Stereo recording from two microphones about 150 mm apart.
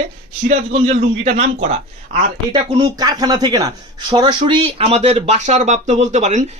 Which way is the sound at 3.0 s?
30° right (ahead or behind).